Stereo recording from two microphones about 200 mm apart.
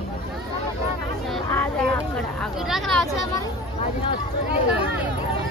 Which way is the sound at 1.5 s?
5° left (ahead or behind).